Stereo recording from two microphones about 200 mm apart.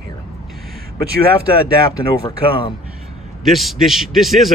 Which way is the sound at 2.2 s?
25° left (ahead or behind).